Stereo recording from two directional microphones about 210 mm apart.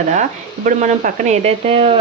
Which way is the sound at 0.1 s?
35° right (ahead or behind).